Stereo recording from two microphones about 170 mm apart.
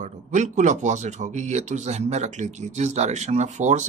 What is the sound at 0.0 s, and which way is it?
Speech, 45° right (ahead or behind).